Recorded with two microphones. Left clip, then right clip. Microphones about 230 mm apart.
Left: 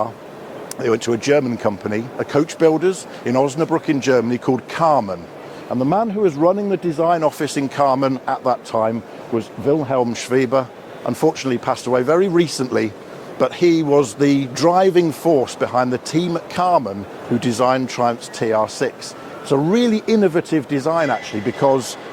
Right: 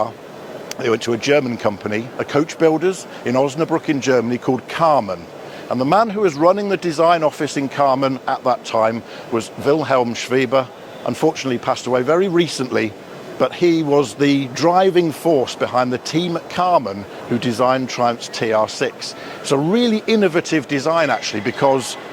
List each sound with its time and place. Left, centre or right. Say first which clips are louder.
0.8 s speech: even; centre
5.7 s speech: right 3 dB; right
7.2 s speech: even; centre
8.8 s speech: right 2 dB; right
10.1 s speech: even; centre
21.2 s speech: right 1 dB; right